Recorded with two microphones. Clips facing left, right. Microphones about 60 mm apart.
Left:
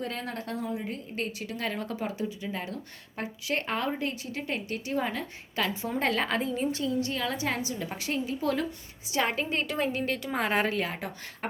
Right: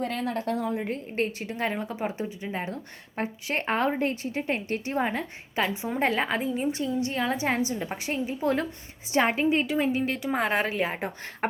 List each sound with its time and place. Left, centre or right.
0.0 s speech: right
0.7 s a woman's voice: right; by 6.7 s centre
6.7 s a woman's voice: right
9.5 s speech: centre
10.8 s a woman's voice: right